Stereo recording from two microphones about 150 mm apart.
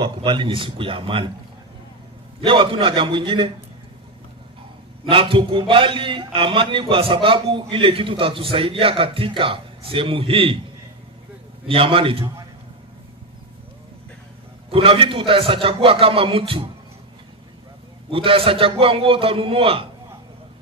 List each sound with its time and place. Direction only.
0.0 s a man's voice: 30° right (ahead or behind)
2.4 s a man's voice: 35° right (ahead or behind)
5.1 s a man's voice: 35° right (ahead or behind)
11.6 s a man's voice: 40° right (ahead or behind)
14.7 s a man's voice: 40° right (ahead or behind)
18.1 s a man's voice: 35° right (ahead or behind)